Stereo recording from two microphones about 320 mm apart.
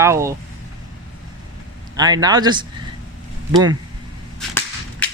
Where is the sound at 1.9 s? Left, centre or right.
Centre.